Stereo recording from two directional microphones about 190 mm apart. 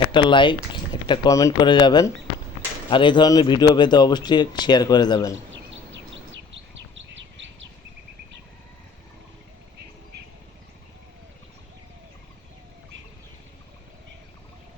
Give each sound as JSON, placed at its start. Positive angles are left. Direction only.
{"t": 0.1, "sound": "speech", "side_deg": 25}
{"t": 5.5, "sound": "bird", "side_deg": -75}